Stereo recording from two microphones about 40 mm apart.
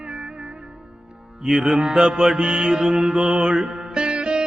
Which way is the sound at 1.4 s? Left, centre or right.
Centre.